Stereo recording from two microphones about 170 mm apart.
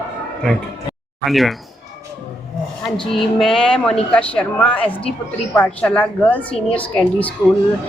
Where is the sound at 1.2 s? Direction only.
Centre (ahead or behind).